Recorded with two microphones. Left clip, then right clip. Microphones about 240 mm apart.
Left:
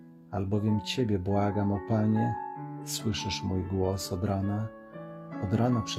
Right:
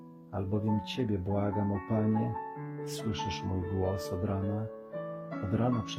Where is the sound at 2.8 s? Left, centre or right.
Left.